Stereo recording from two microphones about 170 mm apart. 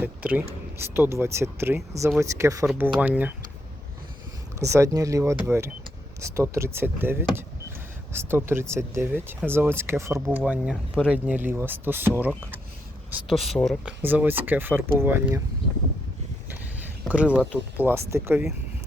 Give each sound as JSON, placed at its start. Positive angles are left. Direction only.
{"t": 0.0, "sound": "speech", "side_deg": -10}
{"t": 4.6, "sound": "speech", "side_deg": -15}
{"t": 14.0, "sound": "speech", "side_deg": -10}
{"t": 17.1, "sound": "speech", "side_deg": -10}